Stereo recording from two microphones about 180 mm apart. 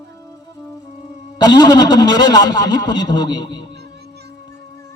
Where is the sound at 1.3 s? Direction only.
25° left (ahead or behind).